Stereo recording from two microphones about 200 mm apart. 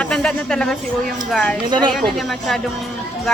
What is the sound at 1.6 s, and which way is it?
Speech, 20° right (ahead or behind).